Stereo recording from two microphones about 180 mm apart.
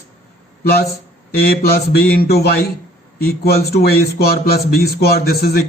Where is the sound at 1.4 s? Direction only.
55° left (ahead or behind).